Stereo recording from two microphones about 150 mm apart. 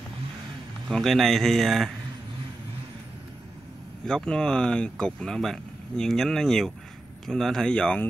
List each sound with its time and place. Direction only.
0.8 s speech: centre (ahead or behind)
4.0 s speech: 5° left (ahead or behind)